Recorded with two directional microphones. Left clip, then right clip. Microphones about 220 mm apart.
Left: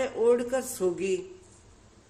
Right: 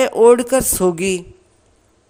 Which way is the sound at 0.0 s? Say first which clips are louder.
Right 13 dB; 50° right (ahead or behind).